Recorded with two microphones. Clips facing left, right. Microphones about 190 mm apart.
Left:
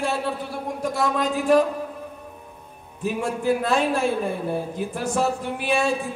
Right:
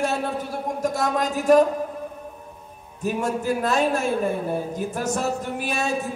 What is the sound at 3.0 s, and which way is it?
A man's voice, 45° right (ahead or behind).